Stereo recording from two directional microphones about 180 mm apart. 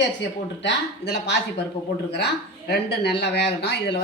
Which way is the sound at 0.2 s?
70° left (ahead or behind).